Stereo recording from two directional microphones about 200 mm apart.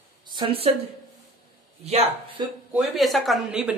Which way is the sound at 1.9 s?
30° right (ahead or behind).